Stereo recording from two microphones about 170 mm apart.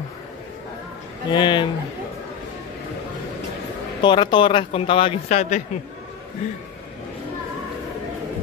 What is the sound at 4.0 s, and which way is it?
Speech, 30° left (ahead or behind).